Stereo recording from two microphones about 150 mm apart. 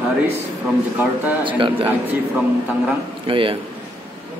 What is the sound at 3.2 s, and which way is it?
Speech, 35° right (ahead or behind).